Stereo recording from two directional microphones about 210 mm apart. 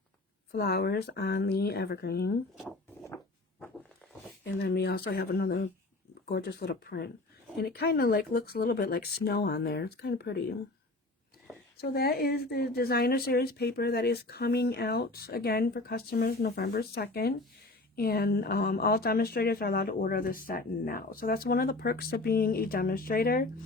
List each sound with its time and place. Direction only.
0.5 s speech: 50° left (ahead or behind)
2.6 s a sound: 10° left (ahead or behind)
4.4 s speech: 50° left (ahead or behind)
11.8 s speech: 45° left (ahead or behind)